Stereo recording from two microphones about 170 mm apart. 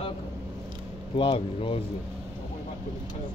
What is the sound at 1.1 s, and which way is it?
Speech, 30° left (ahead or behind).